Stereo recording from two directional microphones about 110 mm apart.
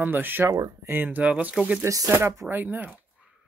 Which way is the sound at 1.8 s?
30° right (ahead or behind).